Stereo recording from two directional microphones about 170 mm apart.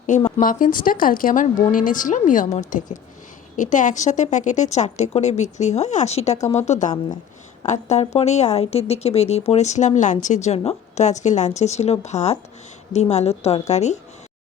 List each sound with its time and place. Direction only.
0.3 s a woman's voice: 50° left (ahead or behind)